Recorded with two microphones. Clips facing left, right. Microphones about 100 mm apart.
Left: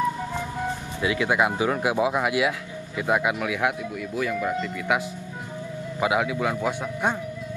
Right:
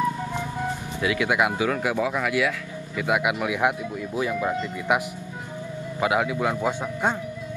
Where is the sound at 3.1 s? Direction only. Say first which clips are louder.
Even; 10° right (ahead or behind).